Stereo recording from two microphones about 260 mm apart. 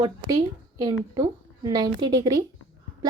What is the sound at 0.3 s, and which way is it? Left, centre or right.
A woman's voice, centre.